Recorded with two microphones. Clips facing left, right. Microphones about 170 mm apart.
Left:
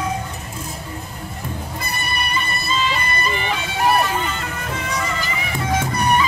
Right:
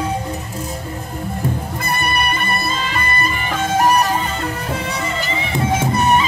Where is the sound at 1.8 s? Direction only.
55° right (ahead or behind).